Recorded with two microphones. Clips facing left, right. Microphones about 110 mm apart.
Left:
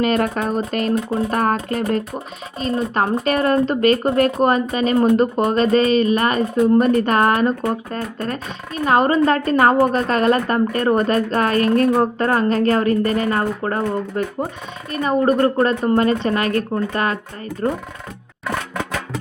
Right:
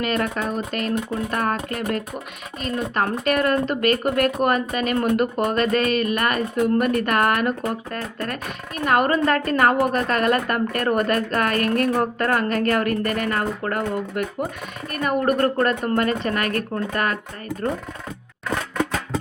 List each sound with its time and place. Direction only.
0.0 s speech: 40° left (ahead or behind); by 17.8 s 20° left (ahead or behind)